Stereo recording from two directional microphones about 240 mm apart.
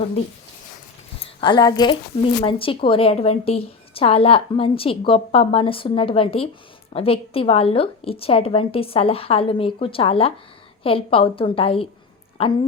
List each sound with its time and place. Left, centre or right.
1.4 s a woman's voice: centre